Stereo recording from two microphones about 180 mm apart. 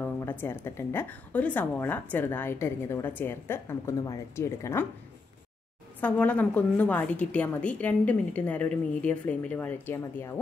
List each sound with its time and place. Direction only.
0.0 s a woman's voice: 10° left (ahead or behind)
5.9 s a woman's voice: 10° left (ahead or behind)